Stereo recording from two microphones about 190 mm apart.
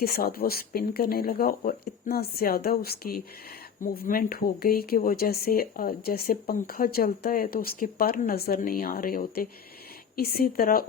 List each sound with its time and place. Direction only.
0.0 s speech: 55° left (ahead or behind)